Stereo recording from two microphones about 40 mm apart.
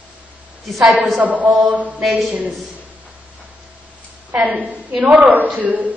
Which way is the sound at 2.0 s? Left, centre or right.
Centre.